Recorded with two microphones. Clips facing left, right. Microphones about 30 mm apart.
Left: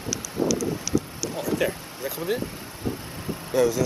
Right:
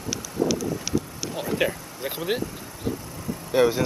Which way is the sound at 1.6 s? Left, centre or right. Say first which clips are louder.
Right 1 dB; right.